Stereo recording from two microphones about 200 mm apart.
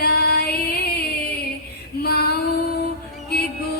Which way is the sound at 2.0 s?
50° left (ahead or behind).